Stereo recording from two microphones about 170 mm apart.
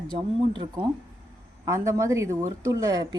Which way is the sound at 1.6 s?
20° right (ahead or behind).